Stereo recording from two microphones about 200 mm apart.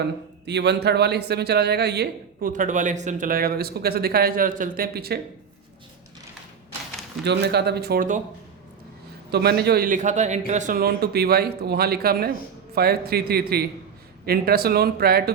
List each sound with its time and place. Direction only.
0.4 s speech: 60° right (ahead or behind)
2.5 s a man's voice: 40° right (ahead or behind)
7.3 s a man's voice: 55° right (ahead or behind)
9.3 s a man's voice: 55° right (ahead or behind)